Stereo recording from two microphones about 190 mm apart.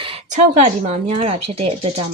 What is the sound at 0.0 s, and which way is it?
Speech, 35° right (ahead or behind).